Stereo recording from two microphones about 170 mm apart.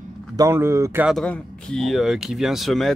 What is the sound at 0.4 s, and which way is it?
Speech, 15° right (ahead or behind).